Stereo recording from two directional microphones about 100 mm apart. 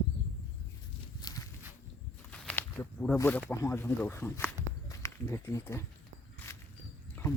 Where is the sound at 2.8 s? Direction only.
35° left (ahead or behind).